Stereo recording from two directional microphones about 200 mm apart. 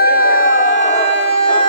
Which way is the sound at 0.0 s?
50° left (ahead or behind).